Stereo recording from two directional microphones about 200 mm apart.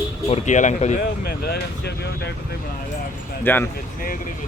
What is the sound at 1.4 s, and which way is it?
Speech, 55° left (ahead or behind).